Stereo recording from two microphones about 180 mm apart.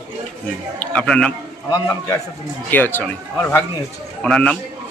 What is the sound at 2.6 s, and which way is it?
Speech, 10° left (ahead or behind).